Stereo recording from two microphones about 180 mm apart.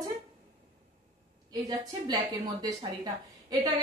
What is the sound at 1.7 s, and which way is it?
A woman's voice, 20° right (ahead or behind).